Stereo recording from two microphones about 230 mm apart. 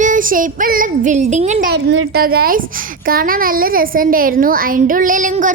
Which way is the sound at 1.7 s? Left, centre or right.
Right.